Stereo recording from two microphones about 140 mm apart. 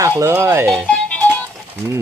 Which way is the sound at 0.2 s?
20° right (ahead or behind).